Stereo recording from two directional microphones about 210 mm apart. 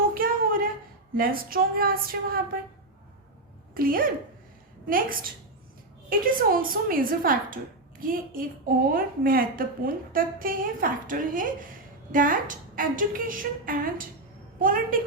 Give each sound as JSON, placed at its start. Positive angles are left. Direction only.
{"t": 0.1, "sound": "a sound", "side_deg": -45}
{"t": 1.1, "sound": "a woman's voice", "side_deg": -45}
{"t": 3.8, "sound": "a woman's voice", "side_deg": -45}